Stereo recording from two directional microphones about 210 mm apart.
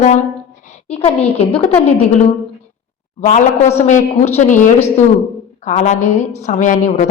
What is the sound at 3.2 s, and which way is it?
A woman's voice, 35° left (ahead or behind).